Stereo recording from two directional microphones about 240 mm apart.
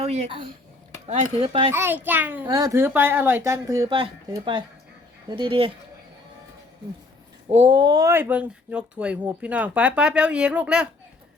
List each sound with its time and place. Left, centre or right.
0.0 s speech: right
1.7 s a child's voice: centre
7.5 s speech: right; by 10.8 s centre